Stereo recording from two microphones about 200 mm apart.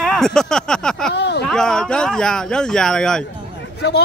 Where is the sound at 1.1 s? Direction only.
55° left (ahead or behind).